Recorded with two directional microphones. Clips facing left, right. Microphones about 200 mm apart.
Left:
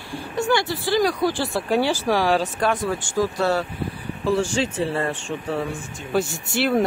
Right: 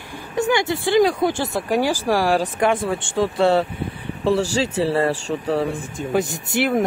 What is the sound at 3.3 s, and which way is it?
Speech, 30° right (ahead or behind).